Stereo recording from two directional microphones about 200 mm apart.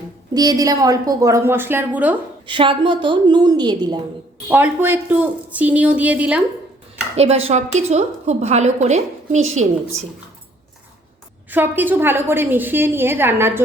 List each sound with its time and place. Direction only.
0.3 s a woman's voice: 20° right (ahead or behind)
2.5 s a woman's voice: 25° right (ahead or behind)
4.4 s a woman's voice: 10° right (ahead or behind)
7.2 s a woman's voice: 30° right (ahead or behind)
11.5 s a woman's voice: 10° right (ahead or behind)